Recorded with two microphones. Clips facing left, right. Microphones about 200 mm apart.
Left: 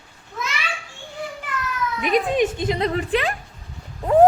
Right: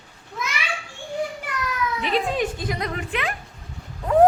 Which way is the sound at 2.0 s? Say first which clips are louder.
Left 5 dB; 15° left (ahead or behind).